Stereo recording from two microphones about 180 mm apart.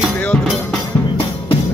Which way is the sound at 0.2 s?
5° left (ahead or behind).